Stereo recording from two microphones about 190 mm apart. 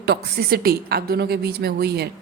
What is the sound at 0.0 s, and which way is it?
A woman's voice, 55° right (ahead or behind).